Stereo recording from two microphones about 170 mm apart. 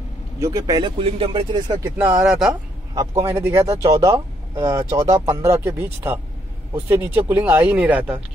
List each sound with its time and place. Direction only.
0.4 s speech: 20° right (ahead or behind)
2.0 s speech: 10° right (ahead or behind)